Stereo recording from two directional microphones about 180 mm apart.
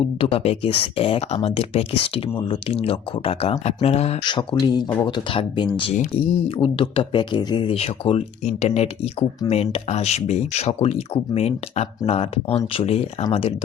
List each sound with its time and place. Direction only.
0.2 s speech: 35° left (ahead or behind)